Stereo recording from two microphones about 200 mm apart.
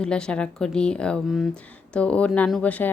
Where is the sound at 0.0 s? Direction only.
5° left (ahead or behind).